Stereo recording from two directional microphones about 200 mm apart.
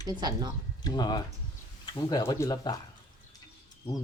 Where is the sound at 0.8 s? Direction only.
20° left (ahead or behind).